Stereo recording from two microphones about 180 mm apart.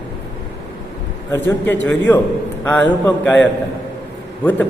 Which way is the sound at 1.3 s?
15° left (ahead or behind).